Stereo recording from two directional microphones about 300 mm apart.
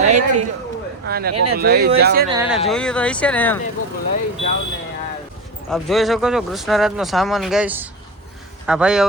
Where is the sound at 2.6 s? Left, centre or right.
Centre.